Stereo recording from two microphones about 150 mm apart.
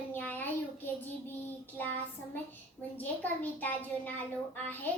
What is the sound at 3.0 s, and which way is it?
A child's voice, 10° left (ahead or behind).